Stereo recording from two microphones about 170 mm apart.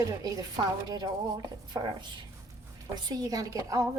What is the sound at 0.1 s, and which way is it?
A woman's voice, 20° right (ahead or behind).